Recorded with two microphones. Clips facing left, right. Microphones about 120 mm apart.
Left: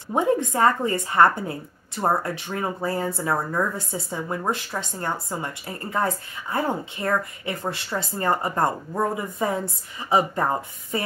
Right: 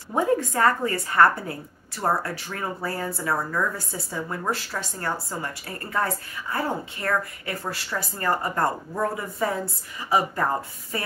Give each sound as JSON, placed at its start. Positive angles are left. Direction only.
{"t": 0.1, "sound": "a woman's voice", "side_deg": 20}